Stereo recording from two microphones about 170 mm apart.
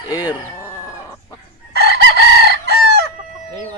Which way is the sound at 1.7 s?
75° right (ahead or behind).